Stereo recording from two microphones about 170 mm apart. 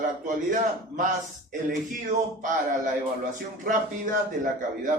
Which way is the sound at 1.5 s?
55° right (ahead or behind).